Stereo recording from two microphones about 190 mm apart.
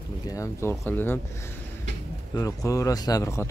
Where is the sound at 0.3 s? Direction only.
15° left (ahead or behind).